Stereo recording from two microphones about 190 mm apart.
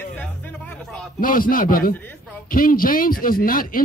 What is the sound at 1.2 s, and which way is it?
Speech, 45° left (ahead or behind).